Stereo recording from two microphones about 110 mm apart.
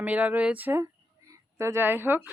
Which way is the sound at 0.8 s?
30° right (ahead or behind).